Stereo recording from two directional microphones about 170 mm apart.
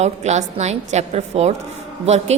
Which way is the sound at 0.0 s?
40° right (ahead or behind).